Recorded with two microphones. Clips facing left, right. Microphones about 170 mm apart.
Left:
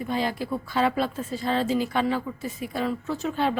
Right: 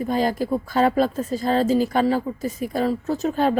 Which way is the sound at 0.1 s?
40° right (ahead or behind).